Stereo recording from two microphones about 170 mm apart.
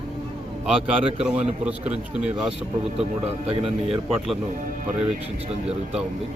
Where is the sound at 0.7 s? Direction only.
5° right (ahead or behind).